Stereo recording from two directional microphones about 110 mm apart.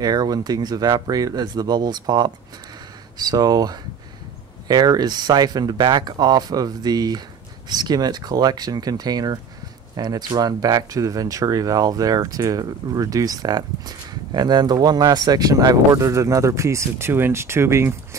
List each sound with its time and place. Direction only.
0.0 s speech: 40° right (ahead or behind)